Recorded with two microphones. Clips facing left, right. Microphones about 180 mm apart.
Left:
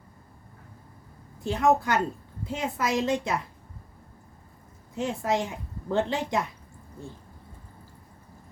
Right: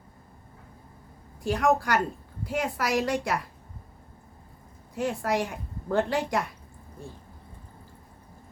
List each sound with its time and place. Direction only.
1.5 s a woman's voice: 20° left (ahead or behind)
4.9 s a woman's voice: 20° left (ahead or behind)